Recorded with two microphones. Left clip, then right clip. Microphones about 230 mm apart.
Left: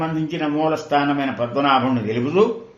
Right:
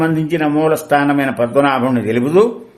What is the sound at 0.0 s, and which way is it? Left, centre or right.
A man's voice, right.